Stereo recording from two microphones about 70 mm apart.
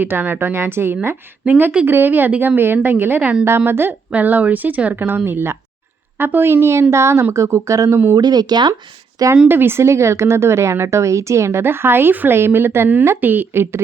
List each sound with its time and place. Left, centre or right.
0.0 s a woman's voice: right
8.1 s speech: right
9.5 s a woman's voice: right